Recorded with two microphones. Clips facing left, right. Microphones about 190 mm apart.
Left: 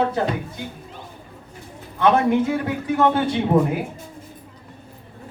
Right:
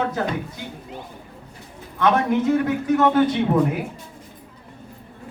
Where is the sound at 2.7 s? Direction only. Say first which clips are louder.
Right 1 dB; 30° left (ahead or behind).